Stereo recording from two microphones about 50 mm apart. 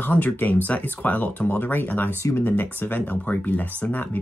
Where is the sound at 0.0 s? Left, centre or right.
Left.